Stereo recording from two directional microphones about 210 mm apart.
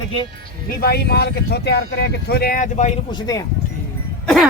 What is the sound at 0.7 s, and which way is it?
Speech, 45° left (ahead or behind).